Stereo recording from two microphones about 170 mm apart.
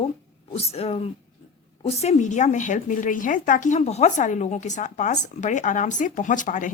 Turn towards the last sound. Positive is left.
turn(degrees=50)  # may be behind; listen again after turning